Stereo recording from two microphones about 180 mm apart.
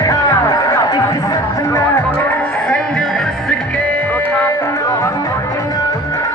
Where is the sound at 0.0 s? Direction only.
20° left (ahead or behind).